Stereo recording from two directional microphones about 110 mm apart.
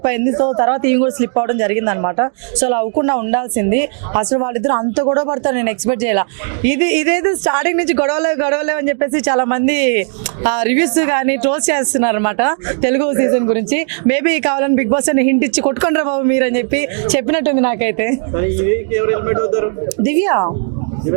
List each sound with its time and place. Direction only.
0.0 s speech: 15° right (ahead or behind)